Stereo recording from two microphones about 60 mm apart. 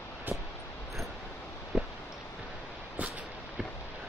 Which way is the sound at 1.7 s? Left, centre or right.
Centre.